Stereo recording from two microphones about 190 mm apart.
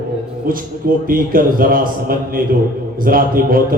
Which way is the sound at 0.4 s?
50° right (ahead or behind).